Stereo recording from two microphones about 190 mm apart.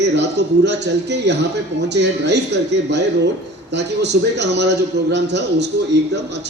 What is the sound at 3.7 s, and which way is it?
A man's voice, 65° right (ahead or behind).